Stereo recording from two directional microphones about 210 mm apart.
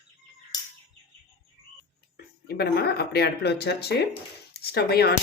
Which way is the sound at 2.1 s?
45° left (ahead or behind).